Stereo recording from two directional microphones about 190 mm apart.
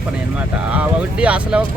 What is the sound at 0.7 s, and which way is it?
Speech, 5° right (ahead or behind).